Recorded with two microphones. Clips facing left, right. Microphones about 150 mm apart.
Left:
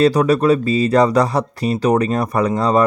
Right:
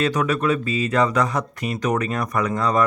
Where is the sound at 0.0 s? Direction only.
35° left (ahead or behind).